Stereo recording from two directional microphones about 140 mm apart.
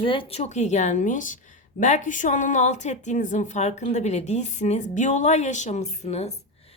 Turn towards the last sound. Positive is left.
turn(degrees=50)  # may be behind; listen again after turning